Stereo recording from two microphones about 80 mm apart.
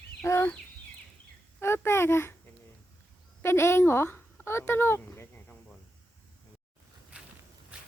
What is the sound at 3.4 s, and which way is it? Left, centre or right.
Speech, left.